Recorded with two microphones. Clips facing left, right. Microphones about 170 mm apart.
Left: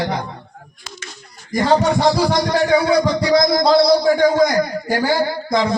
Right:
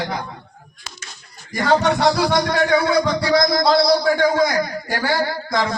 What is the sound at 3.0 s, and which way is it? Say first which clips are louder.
A man's voice: left 2 dB; 20° left (ahead or behind).